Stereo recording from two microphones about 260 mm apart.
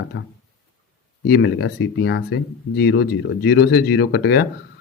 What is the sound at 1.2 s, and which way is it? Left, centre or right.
Speech, left.